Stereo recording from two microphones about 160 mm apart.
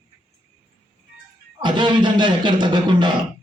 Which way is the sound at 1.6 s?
30° right (ahead or behind).